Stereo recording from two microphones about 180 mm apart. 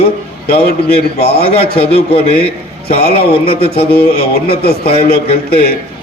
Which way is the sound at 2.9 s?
60° left (ahead or behind).